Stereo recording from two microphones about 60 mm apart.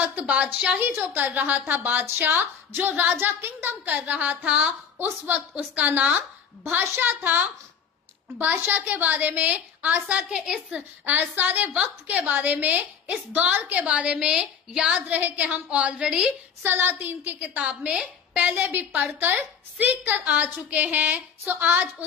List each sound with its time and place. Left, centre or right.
0.0 s a woman's voice: right
0.7 s a woman's voice: right
3.9 s a woman's voice: right
6.1 s a woman's voice: right
8.7 s a woman's voice: right
11.1 s a woman's voice: right; by 15.0 s centre
15.0 s a woman's voice: right
16.6 s a woman's voice: right
17.6 s a woman's voice: centre; by 21.8 s right